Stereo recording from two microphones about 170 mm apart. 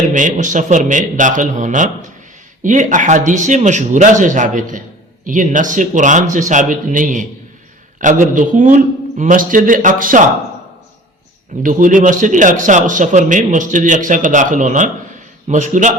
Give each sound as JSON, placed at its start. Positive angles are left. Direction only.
{"t": 0.1, "sound": "a man's voice", "side_deg": -50}
{"t": 11.6, "sound": "a man's voice", "side_deg": -50}